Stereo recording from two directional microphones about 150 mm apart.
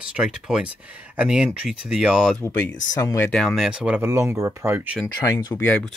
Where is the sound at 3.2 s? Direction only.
5° left (ahead or behind); by 5.0 s 15° right (ahead or behind).